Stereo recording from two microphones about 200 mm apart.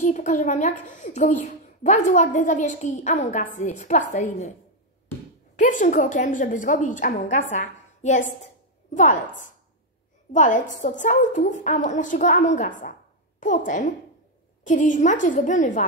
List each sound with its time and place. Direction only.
0.0 s a woman's voice: 40° left (ahead or behind)
5.6 s a woman's voice: 40° left (ahead or behind)